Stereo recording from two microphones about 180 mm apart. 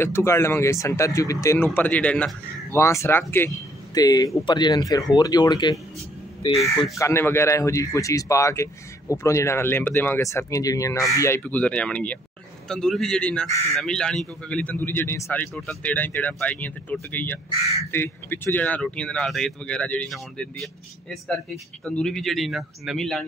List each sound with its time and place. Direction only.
0.0 s speech: 15° left (ahead or behind)
7.0 s speech: 15° left (ahead or behind)
15.5 s speech: 5° left (ahead or behind)